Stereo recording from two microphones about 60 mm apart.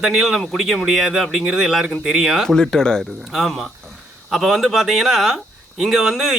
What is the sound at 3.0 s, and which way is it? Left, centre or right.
Speech, centre.